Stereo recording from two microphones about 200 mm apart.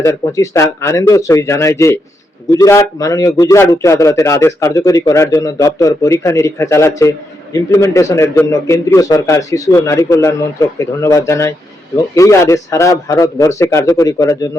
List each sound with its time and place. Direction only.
0.0 s a man's voice: 15° left (ahead or behind)